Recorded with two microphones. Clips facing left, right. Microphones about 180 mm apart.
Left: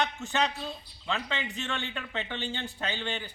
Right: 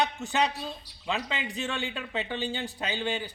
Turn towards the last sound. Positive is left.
turn(degrees=-15)  # may be behind; listen again after turning